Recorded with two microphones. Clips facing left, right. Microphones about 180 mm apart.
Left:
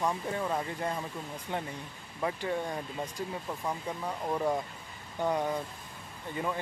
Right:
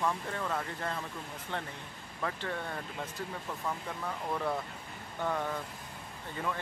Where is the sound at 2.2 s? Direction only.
15° left (ahead or behind).